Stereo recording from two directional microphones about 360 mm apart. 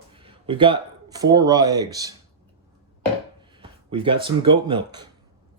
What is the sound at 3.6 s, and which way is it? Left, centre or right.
Speech, centre.